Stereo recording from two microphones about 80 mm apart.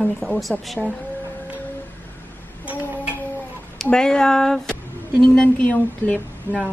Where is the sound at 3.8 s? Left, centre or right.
Centre.